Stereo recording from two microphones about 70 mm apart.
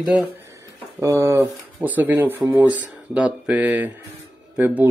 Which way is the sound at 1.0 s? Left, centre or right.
Right.